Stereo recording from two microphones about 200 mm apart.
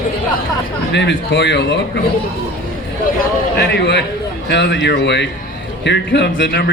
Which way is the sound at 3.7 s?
60° left (ahead or behind).